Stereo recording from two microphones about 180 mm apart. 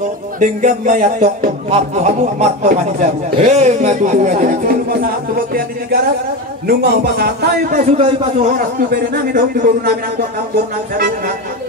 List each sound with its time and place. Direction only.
0.4 s speech: 45° right (ahead or behind); by 7.8 s 60° right (ahead or behind)
7.8 s speech: 40° right (ahead or behind); by 9.4 s 60° right (ahead or behind)